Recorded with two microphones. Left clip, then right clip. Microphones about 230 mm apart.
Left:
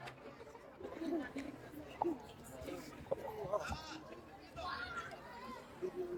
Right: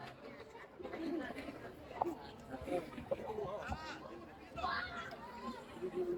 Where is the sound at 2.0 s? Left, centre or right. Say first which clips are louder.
Even; right.